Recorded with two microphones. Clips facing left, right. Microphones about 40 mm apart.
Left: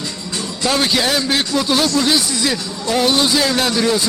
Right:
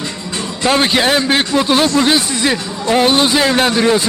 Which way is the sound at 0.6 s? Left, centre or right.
Right.